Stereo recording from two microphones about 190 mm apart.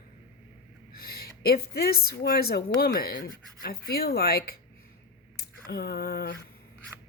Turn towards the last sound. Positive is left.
turn(degrees=55)  # may be behind; listen again after turning